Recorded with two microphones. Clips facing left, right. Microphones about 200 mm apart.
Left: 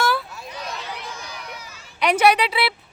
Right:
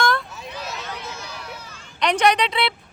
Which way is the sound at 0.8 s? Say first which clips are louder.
Even; 10° left (ahead or behind).